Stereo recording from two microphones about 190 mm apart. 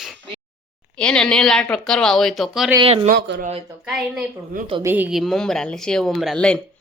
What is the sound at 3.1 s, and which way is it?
Speech, 65° right (ahead or behind).